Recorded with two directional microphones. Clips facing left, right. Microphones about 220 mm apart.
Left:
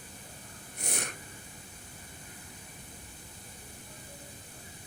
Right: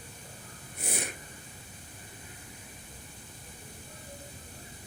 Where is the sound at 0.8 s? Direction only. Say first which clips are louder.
Right 2 dB; 5° right (ahead or behind).